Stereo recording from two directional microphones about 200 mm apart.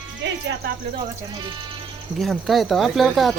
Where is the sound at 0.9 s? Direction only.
25° right (ahead or behind).